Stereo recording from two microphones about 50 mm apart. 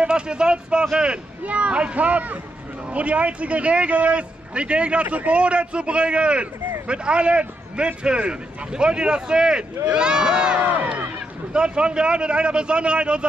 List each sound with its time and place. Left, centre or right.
0.0 s a man's voice: centre
10.6 s speech: right
11.5 s a man's voice: centre